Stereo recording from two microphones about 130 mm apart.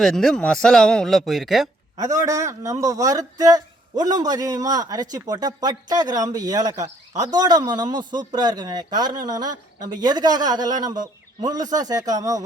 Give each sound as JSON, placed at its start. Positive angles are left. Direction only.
{"t": 0.0, "sound": "a man's voice", "side_deg": 5}
{"t": 2.0, "sound": "a man's voice", "side_deg": -25}